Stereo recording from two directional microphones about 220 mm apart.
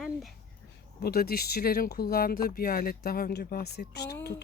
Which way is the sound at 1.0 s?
45° left (ahead or behind).